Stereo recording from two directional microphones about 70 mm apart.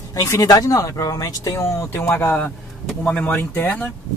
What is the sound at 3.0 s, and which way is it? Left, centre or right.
Speech, centre.